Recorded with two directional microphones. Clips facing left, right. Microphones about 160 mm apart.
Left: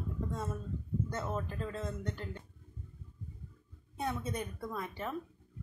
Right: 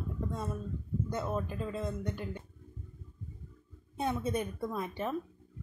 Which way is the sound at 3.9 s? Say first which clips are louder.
Right 4 dB; 20° right (ahead or behind).